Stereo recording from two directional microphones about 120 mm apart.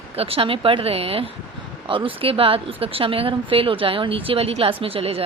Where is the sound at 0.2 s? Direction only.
50° right (ahead or behind).